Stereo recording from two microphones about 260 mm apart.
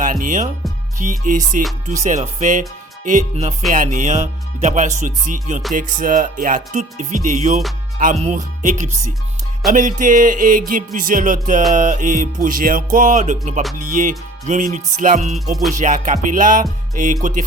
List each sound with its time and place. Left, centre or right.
0.0 s speech: right
0.9 s music: right